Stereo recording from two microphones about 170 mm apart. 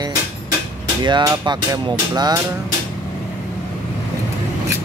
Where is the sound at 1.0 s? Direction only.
25° right (ahead or behind).